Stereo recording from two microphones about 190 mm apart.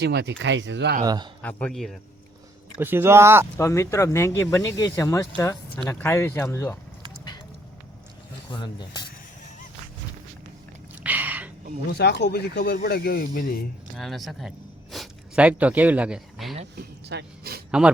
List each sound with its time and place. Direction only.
0.0 s speech: 60° right (ahead or behind)
1.0 s a man's voice: 20° right (ahead or behind)
1.4 s speech: 5° left (ahead or behind)
2.7 s speech: 10° right (ahead or behind)
3.6 s speech: 15° left (ahead or behind)
8.4 s speech: 20° left (ahead or behind)
10.9 s a sound: 10° right (ahead or behind)
11.9 s speech: 60° left (ahead or behind)
13.9 s speech: centre (ahead or behind)
16.7 s speech: 60° right (ahead or behind)
17.7 s a man's voice: 5° right (ahead or behind)